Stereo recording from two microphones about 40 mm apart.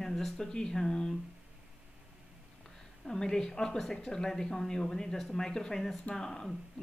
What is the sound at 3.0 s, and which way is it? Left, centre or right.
Speech, centre.